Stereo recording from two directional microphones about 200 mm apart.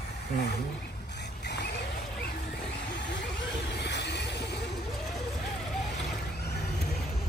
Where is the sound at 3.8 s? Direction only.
55° left (ahead or behind).